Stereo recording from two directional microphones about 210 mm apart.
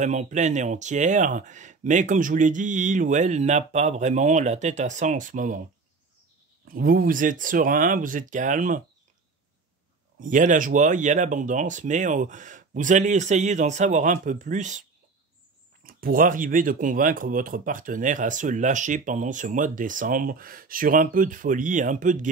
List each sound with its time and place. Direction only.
0.0 s speech: 35° right (ahead or behind)
6.7 s speech: 45° right (ahead or behind)
10.2 s speech: 40° right (ahead or behind)